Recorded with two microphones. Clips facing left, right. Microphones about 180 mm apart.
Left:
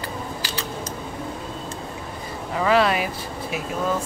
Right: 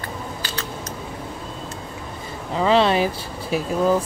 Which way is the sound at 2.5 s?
25° right (ahead or behind).